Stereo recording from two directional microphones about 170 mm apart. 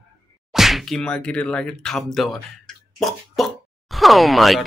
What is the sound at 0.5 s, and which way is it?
Whip, centre (ahead or behind).